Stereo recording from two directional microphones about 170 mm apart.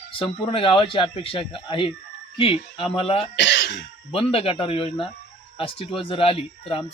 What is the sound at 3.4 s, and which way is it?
Speech, 90° left.